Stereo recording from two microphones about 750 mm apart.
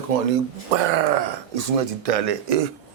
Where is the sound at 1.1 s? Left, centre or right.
Right.